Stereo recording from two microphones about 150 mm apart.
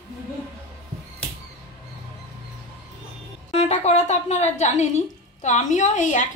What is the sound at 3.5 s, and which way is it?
A woman's voice, 45° left (ahead or behind).